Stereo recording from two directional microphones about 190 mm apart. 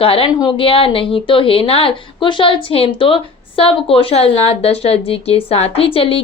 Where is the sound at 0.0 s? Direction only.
30° left (ahead or behind).